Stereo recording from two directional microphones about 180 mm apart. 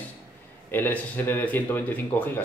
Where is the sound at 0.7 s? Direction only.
10° left (ahead or behind).